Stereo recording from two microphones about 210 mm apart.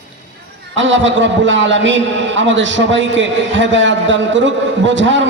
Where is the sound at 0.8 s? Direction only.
60° right (ahead or behind).